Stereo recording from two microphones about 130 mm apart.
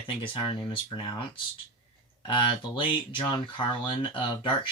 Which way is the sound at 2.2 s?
40° left (ahead or behind).